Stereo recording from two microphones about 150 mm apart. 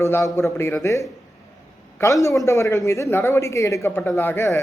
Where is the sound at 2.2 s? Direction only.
20° left (ahead or behind).